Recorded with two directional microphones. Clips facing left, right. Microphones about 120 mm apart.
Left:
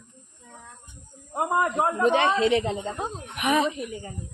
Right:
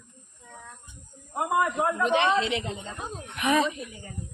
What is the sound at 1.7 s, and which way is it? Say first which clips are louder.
A woman's voice: left 2 dB; 35° left (ahead or behind).